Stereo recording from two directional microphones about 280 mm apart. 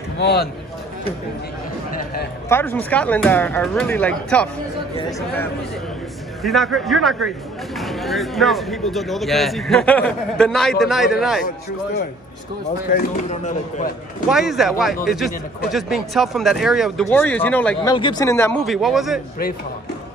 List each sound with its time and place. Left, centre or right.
0.2 s a man's voice: left
2.5 s speech: centre
6.4 s speech: centre
12.9 s speech: left
14.3 s speech: centre